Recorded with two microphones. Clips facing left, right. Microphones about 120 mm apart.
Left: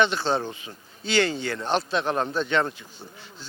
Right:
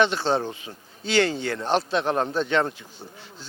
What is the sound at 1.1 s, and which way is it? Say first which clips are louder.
Speech: right 2 dB; 55° right (ahead or behind).